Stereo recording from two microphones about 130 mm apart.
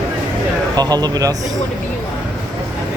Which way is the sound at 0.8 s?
30° right (ahead or behind).